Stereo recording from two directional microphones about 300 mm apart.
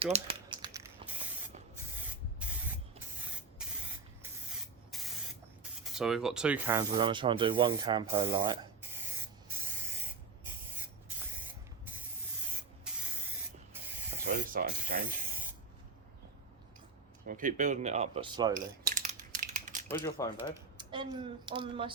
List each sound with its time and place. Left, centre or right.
0.0 s crumpling: centre
3.6 s spray: centre
4.9 s spray: centre
5.8 s speech: centre
14.1 s speech: right
17.2 s speech: right
18.5 s a sound: right
19.9 s speech: centre
20.7 s speech: centre